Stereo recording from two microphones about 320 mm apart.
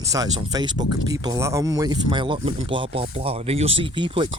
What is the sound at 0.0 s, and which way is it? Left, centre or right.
Speech, centre.